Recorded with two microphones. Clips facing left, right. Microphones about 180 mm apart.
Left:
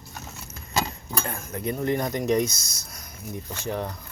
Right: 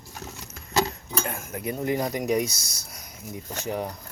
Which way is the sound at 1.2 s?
10° right (ahead or behind).